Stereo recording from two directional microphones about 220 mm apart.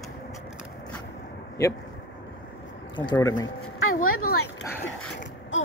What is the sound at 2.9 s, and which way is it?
Speech, 20° left (ahead or behind).